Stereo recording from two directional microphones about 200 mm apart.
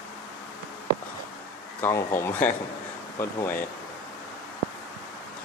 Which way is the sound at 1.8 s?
10° left (ahead or behind).